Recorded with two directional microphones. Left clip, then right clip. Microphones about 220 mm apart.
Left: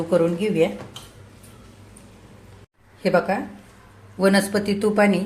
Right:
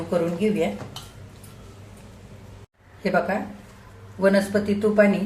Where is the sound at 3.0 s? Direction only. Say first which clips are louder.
Left 3 dB; 45° left (ahead or behind).